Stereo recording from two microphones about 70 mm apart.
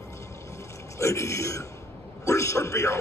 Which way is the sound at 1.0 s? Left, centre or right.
Left.